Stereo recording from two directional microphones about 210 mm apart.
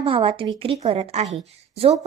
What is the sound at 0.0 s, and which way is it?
A woman's voice, 25° right (ahead or behind).